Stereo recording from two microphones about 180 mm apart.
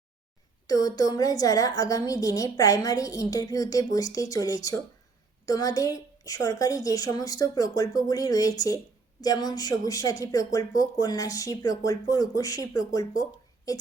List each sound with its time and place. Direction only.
0.7 s a woman's voice: 20° left (ahead or behind)